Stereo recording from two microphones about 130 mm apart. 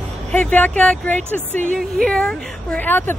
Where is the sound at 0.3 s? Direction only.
10° left (ahead or behind).